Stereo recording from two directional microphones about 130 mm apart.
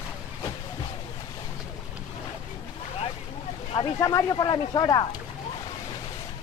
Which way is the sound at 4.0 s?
30° left (ahead or behind).